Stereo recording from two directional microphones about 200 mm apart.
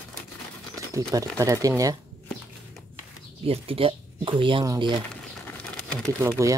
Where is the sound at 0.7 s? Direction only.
15° right (ahead or behind).